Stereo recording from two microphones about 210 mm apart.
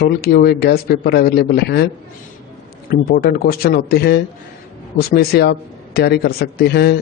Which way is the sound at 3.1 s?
45° left (ahead or behind).